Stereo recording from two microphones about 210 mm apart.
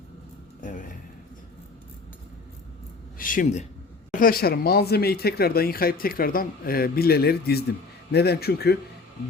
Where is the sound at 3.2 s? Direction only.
40° left (ahead or behind).